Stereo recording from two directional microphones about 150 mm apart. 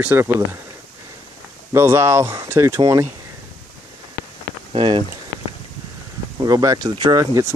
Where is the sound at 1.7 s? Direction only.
15° right (ahead or behind).